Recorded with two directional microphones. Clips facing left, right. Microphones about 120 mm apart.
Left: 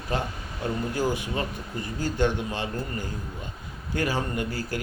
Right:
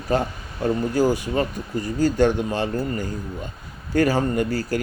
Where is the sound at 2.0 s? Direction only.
40° right (ahead or behind).